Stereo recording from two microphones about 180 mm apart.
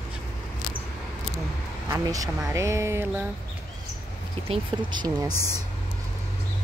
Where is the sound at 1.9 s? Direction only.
20° right (ahead or behind).